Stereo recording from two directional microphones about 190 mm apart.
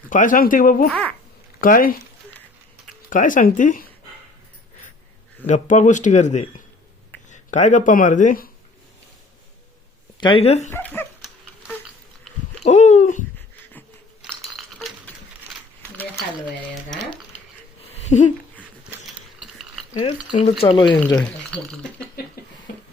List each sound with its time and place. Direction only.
0.1 s speech: 45° left (ahead or behind)
0.9 s a child's voice: 5° left (ahead or behind)
1.6 s speech: 45° left (ahead or behind)
3.1 s speech: 45° left (ahead or behind)
5.5 s speech: 40° left (ahead or behind)
10.2 s speech: 25° left (ahead or behind)
10.7 s speech: 10° left (ahead or behind)
12.6 s a sound: 35° left (ahead or behind)
14.2 s coin: centre (ahead or behind)
17.9 s a sound: 35° left (ahead or behind)
19.0 s ratchet: centre (ahead or behind)
19.9 s speech: 30° left (ahead or behind)
21.2 s speech: 5° left (ahead or behind)